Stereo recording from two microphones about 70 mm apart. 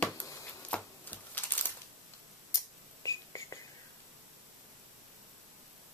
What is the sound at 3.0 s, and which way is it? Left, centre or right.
Whispering, left.